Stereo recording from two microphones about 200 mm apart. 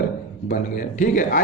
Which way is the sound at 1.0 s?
40° left (ahead or behind).